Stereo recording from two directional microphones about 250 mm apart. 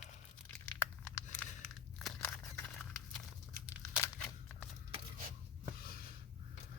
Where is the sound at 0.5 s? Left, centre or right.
Centre.